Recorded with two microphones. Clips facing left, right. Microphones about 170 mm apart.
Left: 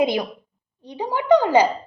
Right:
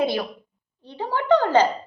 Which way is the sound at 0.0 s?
15° left (ahead or behind).